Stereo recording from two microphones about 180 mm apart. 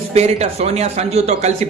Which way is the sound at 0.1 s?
35° right (ahead or behind).